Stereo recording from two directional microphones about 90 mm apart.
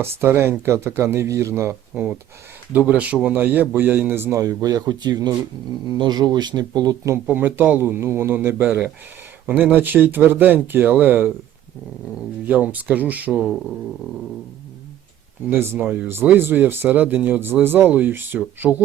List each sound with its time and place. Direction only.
0.0 s speech: 25° right (ahead or behind)
2.7 s speech: 15° right (ahead or behind)
4.4 s speech: 40° right (ahead or behind)
7.3 s speech: 20° right (ahead or behind)
12.5 s speech: 15° right (ahead or behind)
15.4 s speech: 25° right (ahead or behind)